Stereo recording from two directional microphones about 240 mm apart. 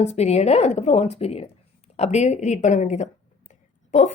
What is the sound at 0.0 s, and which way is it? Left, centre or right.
Speech, left.